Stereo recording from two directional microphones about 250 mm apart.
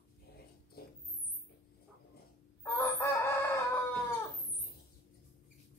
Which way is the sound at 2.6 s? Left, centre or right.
Centre.